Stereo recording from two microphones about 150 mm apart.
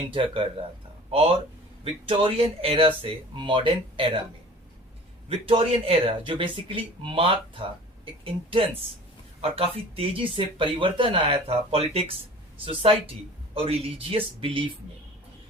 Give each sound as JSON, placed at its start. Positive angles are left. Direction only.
{"t": 0.1, "sound": "speech", "side_deg": -35}
{"t": 5.3, "sound": "speech", "side_deg": -40}